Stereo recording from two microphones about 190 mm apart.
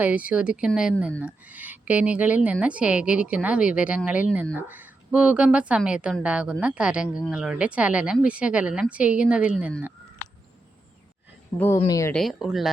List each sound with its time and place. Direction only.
0.0 s speech: 10° right (ahead or behind)
11.9 s speech: 15° left (ahead or behind)
12.1 s speech: centre (ahead or behind)